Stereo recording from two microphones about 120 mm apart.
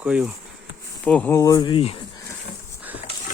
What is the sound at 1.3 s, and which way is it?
Speech, 25° left (ahead or behind).